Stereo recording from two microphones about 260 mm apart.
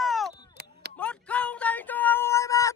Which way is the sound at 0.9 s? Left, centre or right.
Centre.